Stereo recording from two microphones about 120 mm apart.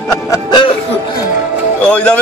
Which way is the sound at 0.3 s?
40° left (ahead or behind).